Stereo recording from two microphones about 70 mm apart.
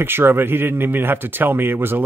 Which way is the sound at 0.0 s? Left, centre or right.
Right.